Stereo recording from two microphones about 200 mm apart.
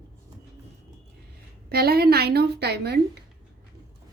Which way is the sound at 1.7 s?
50° right (ahead or behind).